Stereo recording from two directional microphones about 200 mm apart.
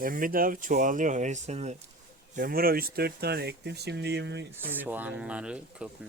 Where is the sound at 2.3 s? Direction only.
45° right (ahead or behind).